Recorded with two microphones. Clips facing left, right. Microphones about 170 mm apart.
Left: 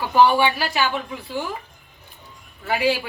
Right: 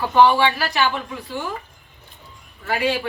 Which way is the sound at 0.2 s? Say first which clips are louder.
Right 1 dB; 10° left (ahead or behind).